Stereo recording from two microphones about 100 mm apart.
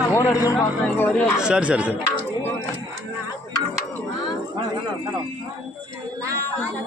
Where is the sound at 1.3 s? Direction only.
10° right (ahead or behind).